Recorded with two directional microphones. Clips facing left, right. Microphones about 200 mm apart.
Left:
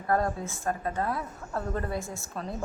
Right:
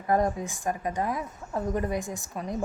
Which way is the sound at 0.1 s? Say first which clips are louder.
Right 2 dB; 15° right (ahead or behind).